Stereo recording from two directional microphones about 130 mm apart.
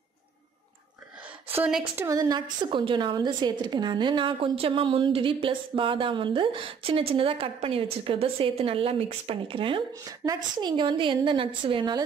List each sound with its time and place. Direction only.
2.0 s a woman's voice: 25° right (ahead or behind); by 9.8 s 40° right (ahead or behind)
10.0 s a woman's voice: 30° right (ahead or behind)